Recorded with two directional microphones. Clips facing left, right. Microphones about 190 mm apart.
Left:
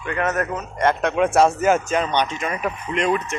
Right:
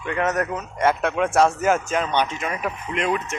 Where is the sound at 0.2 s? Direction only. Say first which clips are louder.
Even; 20° right (ahead or behind).